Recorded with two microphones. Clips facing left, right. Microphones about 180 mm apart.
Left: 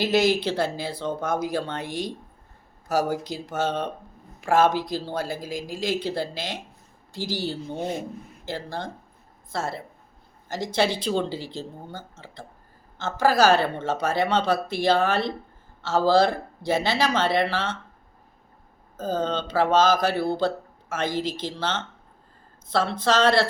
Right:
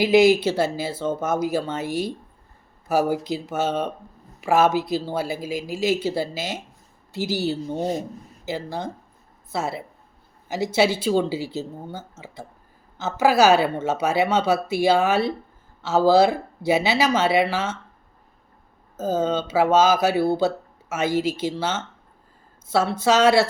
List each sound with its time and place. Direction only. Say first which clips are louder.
0.0 s a woman's voice: right 6 dB; 10° right (ahead or behind)
7.8 s speech: right 2 dB; 40° right (ahead or behind)
8.4 s a woman's voice: right 3 dB; 5° right (ahead or behind)
18.9 s a woman's voice: right 4 dB; 10° right (ahead or behind)